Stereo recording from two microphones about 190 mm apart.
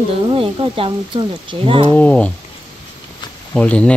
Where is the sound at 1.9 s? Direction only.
10° left (ahead or behind).